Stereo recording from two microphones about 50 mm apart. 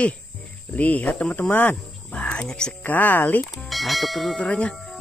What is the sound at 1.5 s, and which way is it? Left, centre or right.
Wild animals, left.